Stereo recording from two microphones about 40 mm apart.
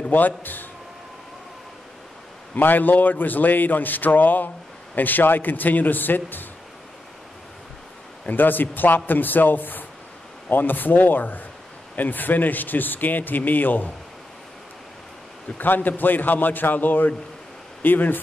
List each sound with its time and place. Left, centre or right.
0.1 s speech: left
2.5 s speech: left
8.3 s speech: left
15.5 s speech: left